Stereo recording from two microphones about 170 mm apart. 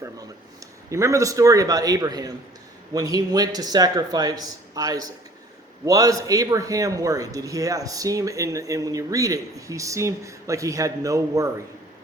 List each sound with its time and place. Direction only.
0.9 s a man's voice: 15° right (ahead or behind)